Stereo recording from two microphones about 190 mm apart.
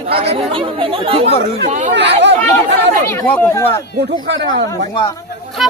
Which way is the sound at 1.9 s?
65° right (ahead or behind).